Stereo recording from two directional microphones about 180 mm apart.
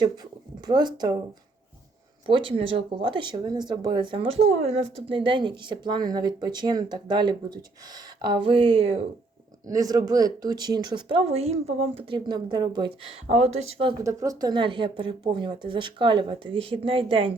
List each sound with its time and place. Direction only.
0.6 s speech: 25° right (ahead or behind)
2.2 s speech: 30° right (ahead or behind)
9.6 s speech: 20° right (ahead or behind)
13.2 s speech: 35° right (ahead or behind)
14.0 s speech: 15° right (ahead or behind)